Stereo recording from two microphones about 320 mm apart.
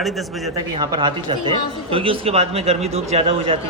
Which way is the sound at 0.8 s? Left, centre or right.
Centre.